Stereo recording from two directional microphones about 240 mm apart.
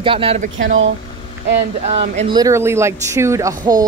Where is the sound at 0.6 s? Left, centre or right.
Right.